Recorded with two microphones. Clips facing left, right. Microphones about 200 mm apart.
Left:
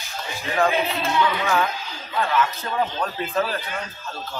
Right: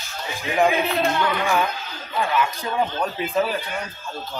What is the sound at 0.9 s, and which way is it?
Music, 50° right (ahead or behind).